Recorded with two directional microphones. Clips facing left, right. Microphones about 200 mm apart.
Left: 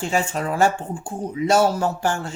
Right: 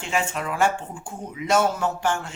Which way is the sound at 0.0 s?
35° left (ahead or behind).